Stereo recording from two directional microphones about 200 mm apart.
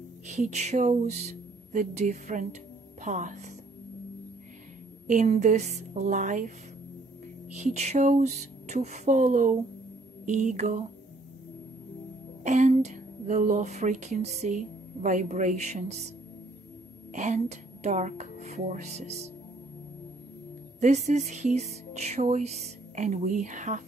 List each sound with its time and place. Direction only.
0.3 s speech: 35° right (ahead or behind)
5.0 s a woman's voice: 40° right (ahead or behind)
7.5 s a woman's voice: 35° right (ahead or behind)
12.4 s a woman's voice: 35° right (ahead or behind)
17.1 s speech: 35° right (ahead or behind)
20.8 s a woman's voice: 35° right (ahead or behind)